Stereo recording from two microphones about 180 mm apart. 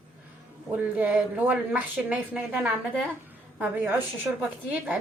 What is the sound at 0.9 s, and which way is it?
A woman's voice, 10° right (ahead or behind).